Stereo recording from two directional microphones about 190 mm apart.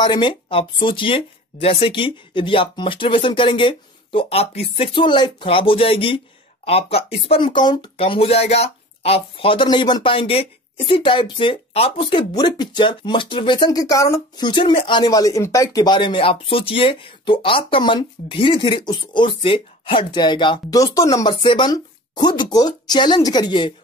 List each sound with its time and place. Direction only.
0.0 s speech: 25° left (ahead or behind)